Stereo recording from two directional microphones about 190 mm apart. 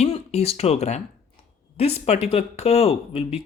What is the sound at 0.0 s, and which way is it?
Speech, 35° left (ahead or behind).